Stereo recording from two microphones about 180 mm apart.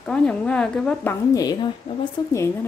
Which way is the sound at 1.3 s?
25° left (ahead or behind).